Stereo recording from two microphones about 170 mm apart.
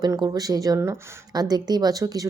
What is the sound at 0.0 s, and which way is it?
A woman's voice, 25° right (ahead or behind).